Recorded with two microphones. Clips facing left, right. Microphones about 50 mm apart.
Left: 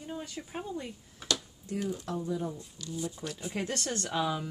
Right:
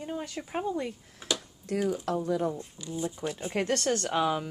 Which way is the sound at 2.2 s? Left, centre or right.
Right.